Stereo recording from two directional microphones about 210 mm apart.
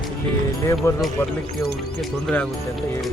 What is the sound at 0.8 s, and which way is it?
Speech, 10° left (ahead or behind).